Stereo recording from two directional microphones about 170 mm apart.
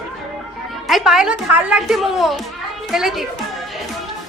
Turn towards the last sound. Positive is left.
turn(degrees=0)  # may be behind; listen again after turning